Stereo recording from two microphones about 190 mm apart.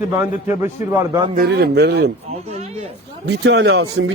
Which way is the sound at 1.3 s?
55° right (ahead or behind).